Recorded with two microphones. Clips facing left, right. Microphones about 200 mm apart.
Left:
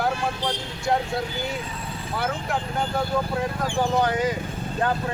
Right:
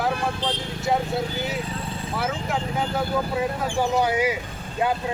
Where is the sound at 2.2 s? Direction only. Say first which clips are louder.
Even; centre (ahead or behind).